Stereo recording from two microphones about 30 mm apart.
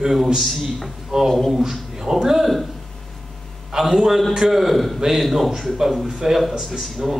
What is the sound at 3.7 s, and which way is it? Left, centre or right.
A man's voice, centre.